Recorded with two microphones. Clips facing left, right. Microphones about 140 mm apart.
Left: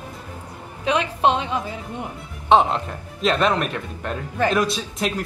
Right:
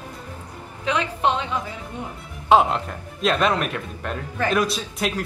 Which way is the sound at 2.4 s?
Centre (ahead or behind).